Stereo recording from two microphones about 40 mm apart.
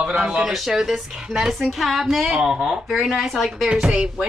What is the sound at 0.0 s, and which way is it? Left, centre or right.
Speech, right.